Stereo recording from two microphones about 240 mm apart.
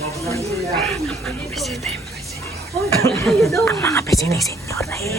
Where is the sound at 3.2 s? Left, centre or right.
Centre.